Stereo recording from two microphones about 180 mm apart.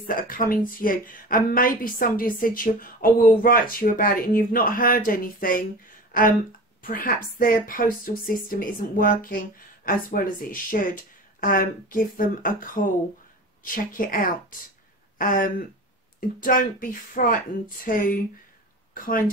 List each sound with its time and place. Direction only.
0.0 s a woman's voice: 50° left (ahead or behind)
6.8 s a woman's voice: 55° left (ahead or behind)
13.7 s a woman's voice: 50° left (ahead or behind)